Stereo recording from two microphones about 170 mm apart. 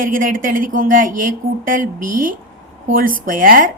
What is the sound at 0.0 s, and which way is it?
A woman's voice, 55° right (ahead or behind).